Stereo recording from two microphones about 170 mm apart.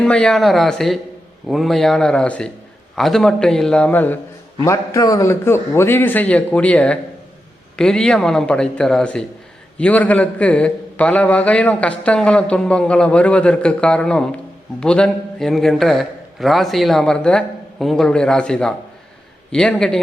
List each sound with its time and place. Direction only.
0.0 s a man's voice: 5° left (ahead or behind)